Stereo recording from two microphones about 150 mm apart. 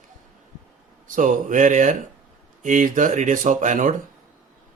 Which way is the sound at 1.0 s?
60° right (ahead or behind).